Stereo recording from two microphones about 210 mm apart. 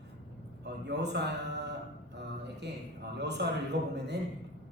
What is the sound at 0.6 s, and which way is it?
A man's voice, 55° right (ahead or behind).